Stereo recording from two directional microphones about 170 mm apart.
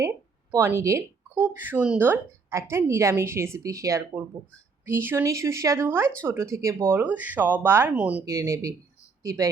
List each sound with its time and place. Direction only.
0.5 s speech: 15° right (ahead or behind)
8.2 s speech: 20° right (ahead or behind)